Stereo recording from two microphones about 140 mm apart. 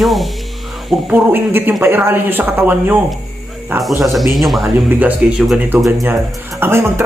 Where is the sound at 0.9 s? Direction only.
10° right (ahead or behind).